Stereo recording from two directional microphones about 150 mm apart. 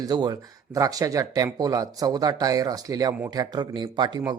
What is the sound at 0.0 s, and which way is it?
Speech, 25° right (ahead or behind).